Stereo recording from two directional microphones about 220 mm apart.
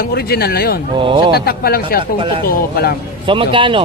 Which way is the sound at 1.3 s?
45° left (ahead or behind).